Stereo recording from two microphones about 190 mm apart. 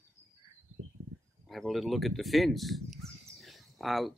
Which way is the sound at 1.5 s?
Centre (ahead or behind).